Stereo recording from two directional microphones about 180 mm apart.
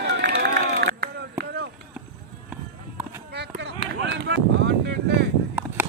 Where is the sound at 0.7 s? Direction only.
70° right (ahead or behind).